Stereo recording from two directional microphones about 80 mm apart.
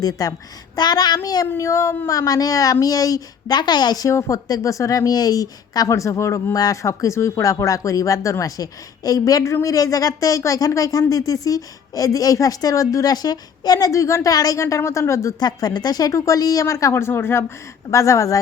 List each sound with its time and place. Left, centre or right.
0.0 s speech: left
0.8 s speech: left
1.5 s speech: left
4.1 s speech: left
5.9 s speech: left
14.6 s speech: left
15.4 s speech: left
16.1 s speech: left
17.9 s speech: left